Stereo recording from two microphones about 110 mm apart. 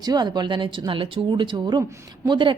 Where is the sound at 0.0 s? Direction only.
40° right (ahead or behind).